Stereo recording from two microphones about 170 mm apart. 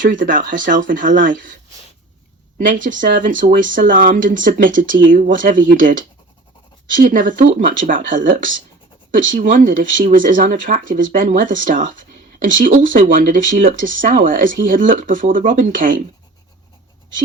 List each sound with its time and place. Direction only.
0.0 s speech: 50° right (ahead or behind)
2.6 s speech: 50° right (ahead or behind)